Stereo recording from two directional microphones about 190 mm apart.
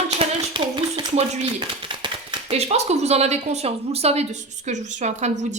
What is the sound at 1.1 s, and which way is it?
Speech, 35° right (ahead or behind).